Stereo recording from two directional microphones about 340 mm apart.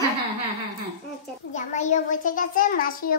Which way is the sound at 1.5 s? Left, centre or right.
Left.